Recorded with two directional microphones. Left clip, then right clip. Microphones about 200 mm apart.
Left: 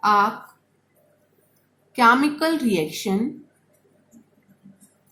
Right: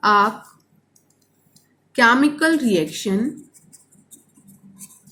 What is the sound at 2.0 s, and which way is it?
A woman's voice, 20° left (ahead or behind).